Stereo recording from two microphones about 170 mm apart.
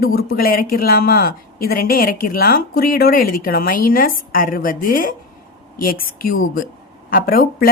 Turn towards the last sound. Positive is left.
turn(degrees=60)  # may be behind; listen again after turning